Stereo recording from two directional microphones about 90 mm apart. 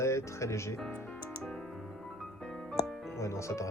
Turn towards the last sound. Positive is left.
turn(degrees=35)  # may be behind; listen again after turning